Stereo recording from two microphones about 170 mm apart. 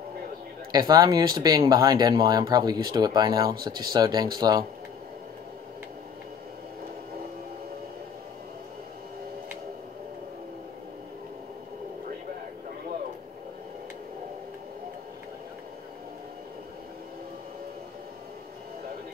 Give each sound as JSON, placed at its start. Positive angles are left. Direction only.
{"t": 0.7, "sound": "speech", "side_deg": -25}